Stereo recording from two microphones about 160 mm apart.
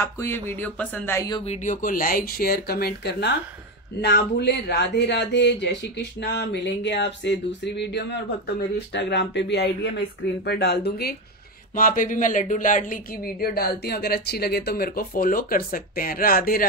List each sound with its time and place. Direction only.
0.0 s speech: 15° left (ahead or behind)
1.4 s speech: 45° left (ahead or behind); by 11.1 s 85° left
11.7 s speech: 60° left (ahead or behind)